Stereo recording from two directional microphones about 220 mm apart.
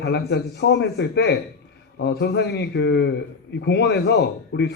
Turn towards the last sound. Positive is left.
turn(degrees=50)  # may be behind; listen again after turning